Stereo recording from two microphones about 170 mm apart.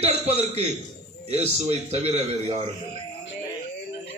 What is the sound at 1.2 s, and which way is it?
A man's voice, 40° right (ahead or behind).